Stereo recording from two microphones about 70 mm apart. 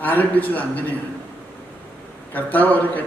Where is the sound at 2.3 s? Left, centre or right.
Left.